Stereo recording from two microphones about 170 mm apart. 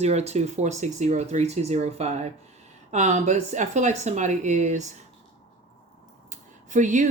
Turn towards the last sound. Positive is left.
turn(degrees=-45)  # may be behind; listen again after turning